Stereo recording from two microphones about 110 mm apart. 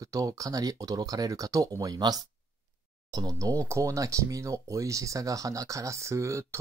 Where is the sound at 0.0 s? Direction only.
30° right (ahead or behind).